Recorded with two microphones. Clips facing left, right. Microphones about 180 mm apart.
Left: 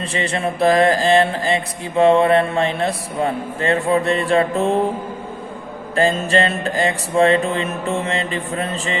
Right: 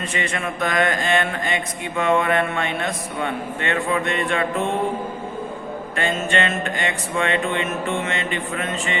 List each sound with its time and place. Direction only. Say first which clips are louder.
0.0 s mantra: left 4 dB; 30° left (ahead or behind)
6.0 s mantra: left 6 dB; 35° left (ahead or behind)